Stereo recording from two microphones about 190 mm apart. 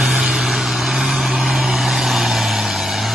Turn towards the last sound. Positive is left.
turn(degrees=0)  # may be behind; listen again after turning